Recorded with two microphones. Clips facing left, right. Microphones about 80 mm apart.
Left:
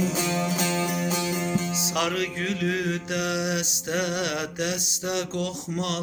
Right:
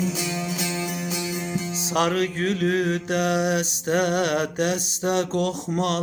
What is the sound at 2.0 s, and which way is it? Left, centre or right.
Mantra, right.